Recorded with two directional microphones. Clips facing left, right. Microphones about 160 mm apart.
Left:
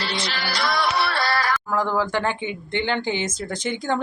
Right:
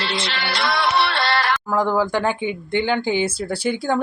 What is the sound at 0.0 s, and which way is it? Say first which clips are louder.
Music: right 2 dB; 25° right (ahead or behind).